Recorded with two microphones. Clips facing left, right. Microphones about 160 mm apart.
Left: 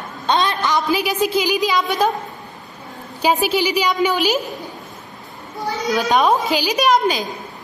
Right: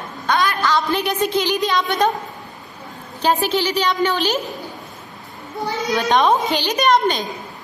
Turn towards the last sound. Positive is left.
turn(degrees=5)  # may be behind; listen again after turning